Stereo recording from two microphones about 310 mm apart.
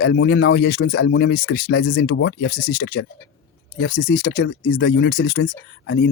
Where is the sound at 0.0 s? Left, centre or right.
Left.